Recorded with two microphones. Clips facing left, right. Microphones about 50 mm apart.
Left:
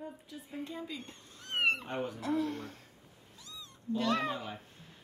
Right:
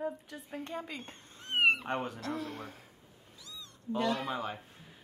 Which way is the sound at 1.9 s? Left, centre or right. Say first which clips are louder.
Right 2 dB; right.